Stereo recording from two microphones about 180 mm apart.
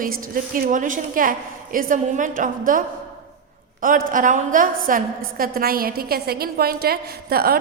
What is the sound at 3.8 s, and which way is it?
A woman's voice, 50° right (ahead or behind).